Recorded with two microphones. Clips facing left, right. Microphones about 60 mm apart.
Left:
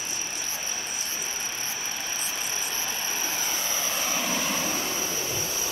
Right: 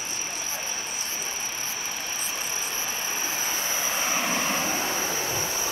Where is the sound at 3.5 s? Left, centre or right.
Centre.